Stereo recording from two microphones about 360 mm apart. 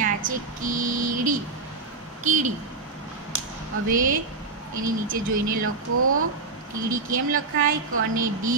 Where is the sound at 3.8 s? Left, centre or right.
Right.